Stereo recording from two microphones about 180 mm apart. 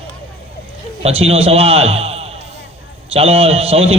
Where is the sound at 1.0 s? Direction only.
35° right (ahead or behind).